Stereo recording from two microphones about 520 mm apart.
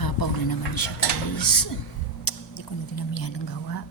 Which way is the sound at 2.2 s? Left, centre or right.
Left.